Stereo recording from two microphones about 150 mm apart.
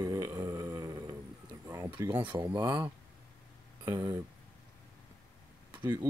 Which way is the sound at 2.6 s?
30° right (ahead or behind).